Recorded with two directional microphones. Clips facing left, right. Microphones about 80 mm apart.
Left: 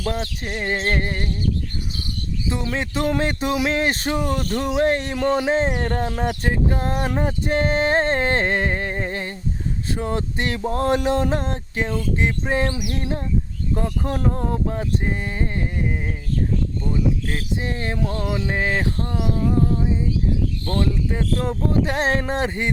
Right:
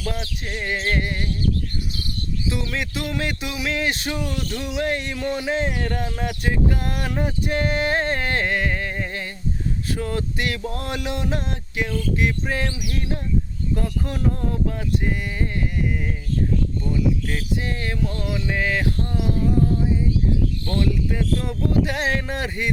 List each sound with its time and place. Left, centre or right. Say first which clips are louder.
0.0 s speech: left 4 dB; left
2.5 s speech: left 3 dB; left
12.6 s bird: left 4 dB; left
13.0 s speech: left 1 dB; left
16.9 s speech: even; left
18.0 s speech: left 3 dB; left
20.8 s speech: even; left